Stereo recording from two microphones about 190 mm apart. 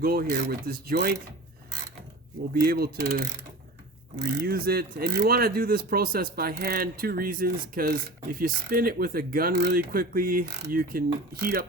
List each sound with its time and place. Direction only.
0.0 s speech: 50° right (ahead or behind)
2.6 s speech: 55° right (ahead or behind)